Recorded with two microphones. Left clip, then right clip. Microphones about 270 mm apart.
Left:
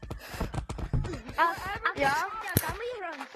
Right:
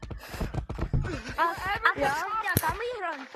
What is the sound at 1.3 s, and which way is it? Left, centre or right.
Speech, centre.